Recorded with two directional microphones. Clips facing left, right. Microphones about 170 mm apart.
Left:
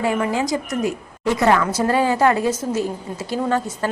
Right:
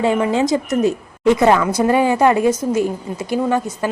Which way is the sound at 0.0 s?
25° right (ahead or behind).